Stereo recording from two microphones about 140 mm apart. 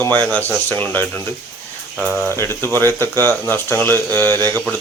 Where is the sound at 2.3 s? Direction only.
15° left (ahead or behind).